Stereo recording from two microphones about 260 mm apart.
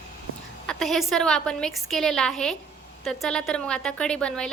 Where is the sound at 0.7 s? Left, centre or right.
Centre.